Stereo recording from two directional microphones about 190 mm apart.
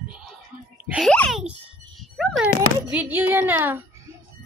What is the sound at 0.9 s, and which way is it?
Speech, 5° left (ahead or behind).